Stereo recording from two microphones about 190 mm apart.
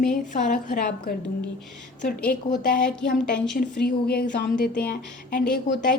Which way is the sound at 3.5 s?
60° left (ahead or behind).